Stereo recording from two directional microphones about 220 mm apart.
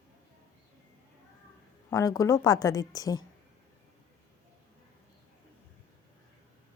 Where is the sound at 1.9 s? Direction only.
15° left (ahead or behind).